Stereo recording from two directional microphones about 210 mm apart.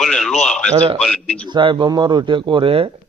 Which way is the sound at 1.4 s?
20° right (ahead or behind).